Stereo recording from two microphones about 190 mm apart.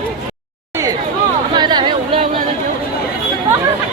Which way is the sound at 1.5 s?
25° right (ahead or behind).